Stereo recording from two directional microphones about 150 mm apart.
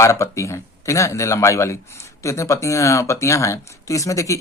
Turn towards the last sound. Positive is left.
turn(degrees=20)  # may be behind; listen again after turning